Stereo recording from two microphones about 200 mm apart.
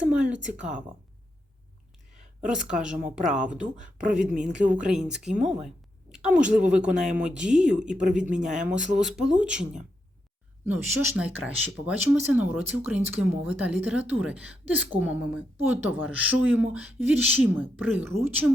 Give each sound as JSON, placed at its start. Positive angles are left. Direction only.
{"t": 0.0, "sound": "speech", "side_deg": -5}
{"t": 0.6, "sound": "speech", "side_deg": -40}
{"t": 2.4, "sound": "speech", "side_deg": -5}